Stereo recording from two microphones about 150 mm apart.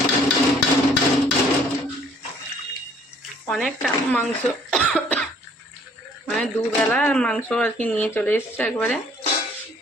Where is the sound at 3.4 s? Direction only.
Centre (ahead or behind).